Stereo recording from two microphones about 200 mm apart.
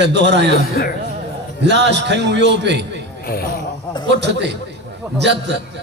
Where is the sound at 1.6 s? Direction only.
60° right (ahead or behind).